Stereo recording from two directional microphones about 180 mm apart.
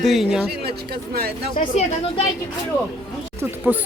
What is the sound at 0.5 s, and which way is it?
Speech, 60° right (ahead or behind).